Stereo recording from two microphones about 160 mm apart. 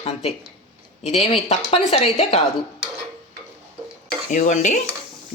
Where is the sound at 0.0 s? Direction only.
40° left (ahead or behind).